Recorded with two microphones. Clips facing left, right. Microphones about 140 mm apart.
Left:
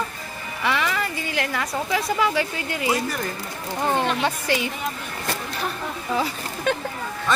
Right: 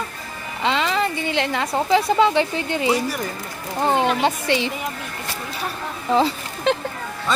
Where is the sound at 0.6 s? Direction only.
25° right (ahead or behind).